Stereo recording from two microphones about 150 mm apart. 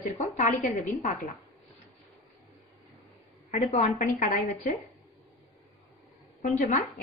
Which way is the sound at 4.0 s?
55° left (ahead or behind).